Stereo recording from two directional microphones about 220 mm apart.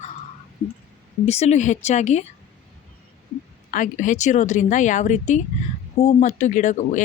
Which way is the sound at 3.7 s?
35° left (ahead or behind).